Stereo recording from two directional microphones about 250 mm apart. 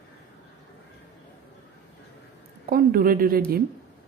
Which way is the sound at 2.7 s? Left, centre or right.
Right.